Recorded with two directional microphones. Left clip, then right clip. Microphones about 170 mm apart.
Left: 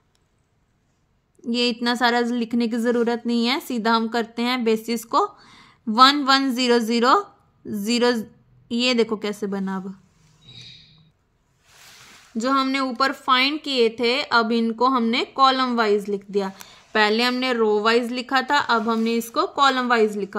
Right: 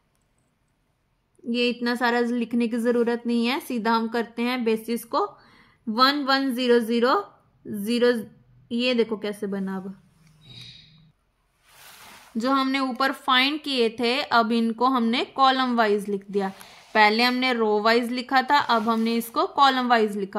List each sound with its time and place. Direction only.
1.4 s a woman's voice: 40° left (ahead or behind)
12.4 s a woman's voice: 10° left (ahead or behind)